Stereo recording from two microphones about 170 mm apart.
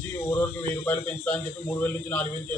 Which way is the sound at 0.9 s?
10° left (ahead or behind).